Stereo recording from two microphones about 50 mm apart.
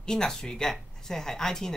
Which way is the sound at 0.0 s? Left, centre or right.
Centre.